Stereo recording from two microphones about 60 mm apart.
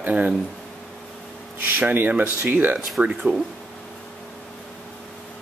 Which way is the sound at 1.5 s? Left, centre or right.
Right.